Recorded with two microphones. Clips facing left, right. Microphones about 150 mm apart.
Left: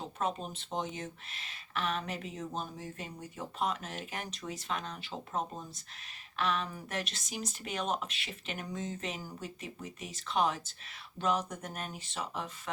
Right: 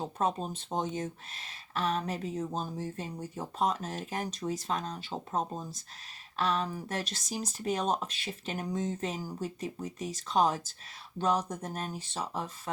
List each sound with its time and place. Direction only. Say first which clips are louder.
0.2 s speech: right 3 dB; 35° right (ahead or behind)